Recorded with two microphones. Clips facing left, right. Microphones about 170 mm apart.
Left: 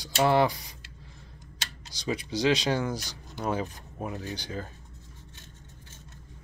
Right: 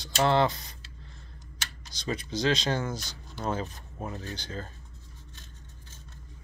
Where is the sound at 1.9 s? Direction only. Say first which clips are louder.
Left 2 dB; 15° left (ahead or behind).